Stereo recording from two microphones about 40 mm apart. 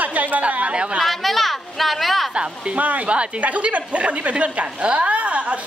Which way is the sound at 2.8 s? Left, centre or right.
Right.